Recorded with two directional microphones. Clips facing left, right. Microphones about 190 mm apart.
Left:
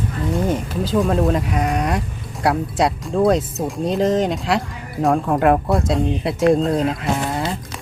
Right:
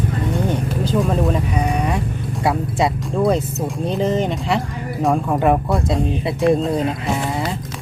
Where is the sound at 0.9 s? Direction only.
Centre (ahead or behind).